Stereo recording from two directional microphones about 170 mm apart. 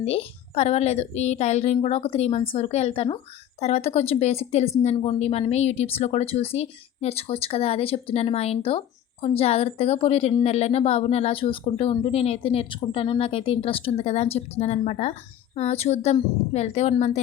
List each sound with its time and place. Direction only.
0.0 s speech: 35° left (ahead or behind)